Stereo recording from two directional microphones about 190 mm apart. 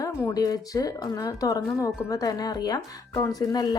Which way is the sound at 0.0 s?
20° left (ahead or behind).